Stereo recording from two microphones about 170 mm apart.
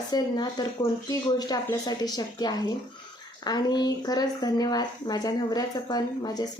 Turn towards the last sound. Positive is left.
turn(degrees=20)  # may be behind; listen again after turning